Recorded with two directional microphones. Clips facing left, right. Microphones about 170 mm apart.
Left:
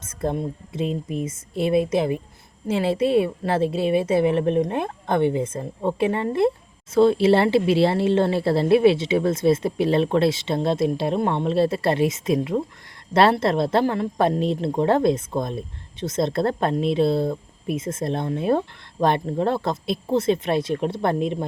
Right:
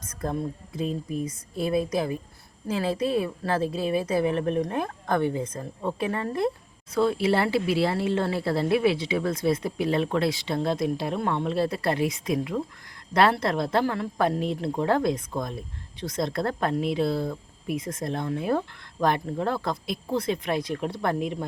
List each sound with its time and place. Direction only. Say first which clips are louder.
0.0 s speech: left 4 dB; 25° left (ahead or behind)